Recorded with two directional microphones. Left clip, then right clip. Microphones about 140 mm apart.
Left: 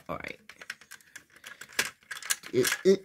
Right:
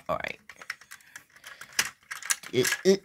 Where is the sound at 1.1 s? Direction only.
15° left (ahead or behind).